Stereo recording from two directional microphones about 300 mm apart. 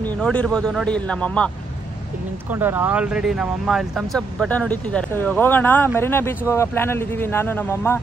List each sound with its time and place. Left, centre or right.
0.0 s speech: centre
2.5 s speech: centre